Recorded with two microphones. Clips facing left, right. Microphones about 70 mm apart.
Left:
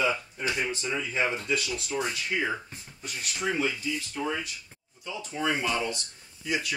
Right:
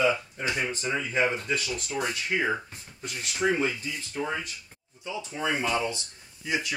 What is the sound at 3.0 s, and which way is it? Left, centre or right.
Speech, right.